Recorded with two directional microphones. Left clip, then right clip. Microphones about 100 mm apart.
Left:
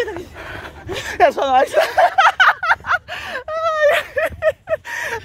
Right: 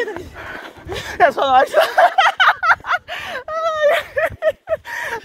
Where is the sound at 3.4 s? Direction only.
55° left (ahead or behind); by 5.2 s 75° left (ahead or behind).